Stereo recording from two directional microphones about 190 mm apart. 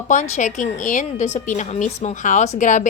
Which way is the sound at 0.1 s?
40° left (ahead or behind).